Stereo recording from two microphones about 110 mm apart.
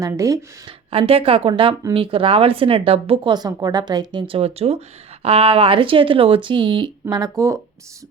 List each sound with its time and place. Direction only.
0.1 s speech: 30° right (ahead or behind)
0.9 s a woman's voice: 60° right (ahead or behind)
3.3 s a woman's voice: 35° right (ahead or behind)
4.4 s speech: 65° right (ahead or behind); by 6.9 s 45° right (ahead or behind)
7.1 s a woman's voice: 30° right (ahead or behind)